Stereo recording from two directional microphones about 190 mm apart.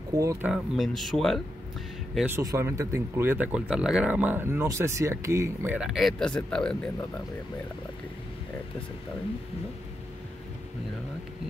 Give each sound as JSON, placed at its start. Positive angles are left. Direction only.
{"t": 0.1, "sound": "speech", "side_deg": -15}
{"t": 0.5, "sound": "speech", "side_deg": 0}
{"t": 2.1, "sound": "speech", "side_deg": -10}